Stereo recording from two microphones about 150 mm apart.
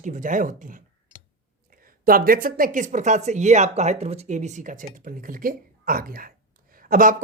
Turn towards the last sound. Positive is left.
turn(degrees=-65)  # may be behind; listen again after turning